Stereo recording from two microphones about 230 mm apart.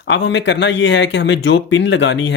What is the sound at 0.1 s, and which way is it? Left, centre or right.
Speech, left.